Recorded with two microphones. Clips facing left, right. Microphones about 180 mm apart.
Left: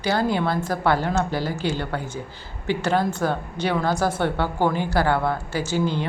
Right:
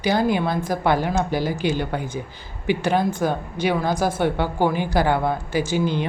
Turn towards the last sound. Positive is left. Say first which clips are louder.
# right 2 dB
turn(degrees=-15)  # may be behind; listen again after turning